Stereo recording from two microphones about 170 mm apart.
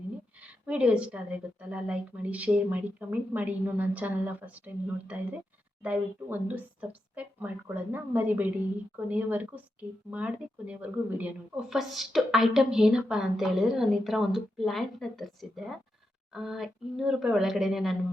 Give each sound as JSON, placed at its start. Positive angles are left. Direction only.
{"t": 0.4, "sound": "a woman's voice", "side_deg": -5}